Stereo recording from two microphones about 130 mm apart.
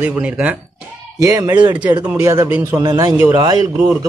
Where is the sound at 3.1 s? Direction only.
15° right (ahead or behind).